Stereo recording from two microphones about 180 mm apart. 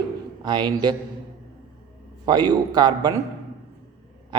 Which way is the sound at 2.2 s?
25° right (ahead or behind).